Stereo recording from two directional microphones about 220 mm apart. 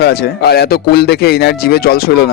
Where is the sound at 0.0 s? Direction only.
45° left (ahead or behind).